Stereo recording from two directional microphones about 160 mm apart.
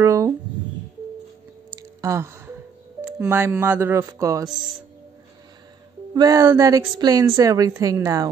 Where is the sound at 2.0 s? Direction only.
15° right (ahead or behind).